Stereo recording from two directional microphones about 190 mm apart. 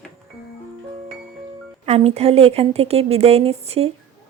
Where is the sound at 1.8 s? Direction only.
35° right (ahead or behind).